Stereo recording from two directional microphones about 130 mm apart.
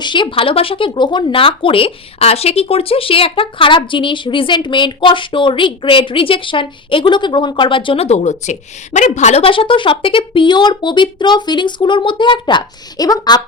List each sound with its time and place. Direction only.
0.0 s speech: 40° left (ahead or behind)